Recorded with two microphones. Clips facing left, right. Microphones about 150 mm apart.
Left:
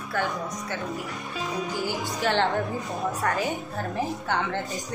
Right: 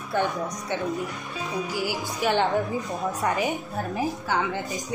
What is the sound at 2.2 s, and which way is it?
Speech, 15° right (ahead or behind).